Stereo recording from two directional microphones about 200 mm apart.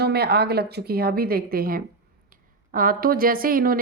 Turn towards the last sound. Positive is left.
turn(degrees=-45)  # may be behind; listen again after turning